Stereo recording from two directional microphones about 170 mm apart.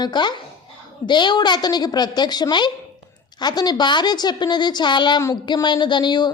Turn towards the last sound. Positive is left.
turn(degrees=25)  # may be behind; listen again after turning